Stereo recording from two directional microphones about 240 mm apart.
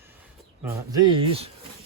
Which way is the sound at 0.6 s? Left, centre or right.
Centre.